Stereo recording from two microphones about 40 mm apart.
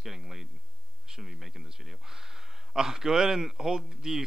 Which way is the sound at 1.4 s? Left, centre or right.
Centre.